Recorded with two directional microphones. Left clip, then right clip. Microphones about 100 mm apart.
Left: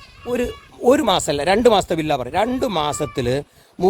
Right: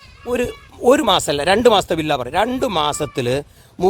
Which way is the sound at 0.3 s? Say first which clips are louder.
Right 2 dB; 15° right (ahead or behind).